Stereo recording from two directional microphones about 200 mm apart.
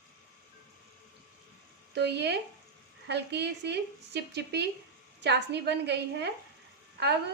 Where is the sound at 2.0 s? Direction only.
55° right (ahead or behind).